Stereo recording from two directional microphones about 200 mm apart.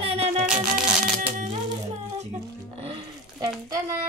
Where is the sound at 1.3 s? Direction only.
40° right (ahead or behind).